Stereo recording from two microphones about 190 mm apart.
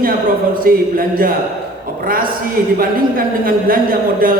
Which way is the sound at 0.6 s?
50° right (ahead or behind).